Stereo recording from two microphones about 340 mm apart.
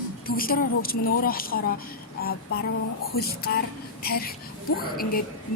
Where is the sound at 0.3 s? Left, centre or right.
Left.